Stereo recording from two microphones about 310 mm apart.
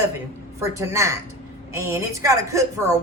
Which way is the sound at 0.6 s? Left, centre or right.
Centre.